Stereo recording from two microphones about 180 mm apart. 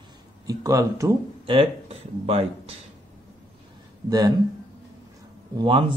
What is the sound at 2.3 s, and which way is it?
Speech, 35° right (ahead or behind).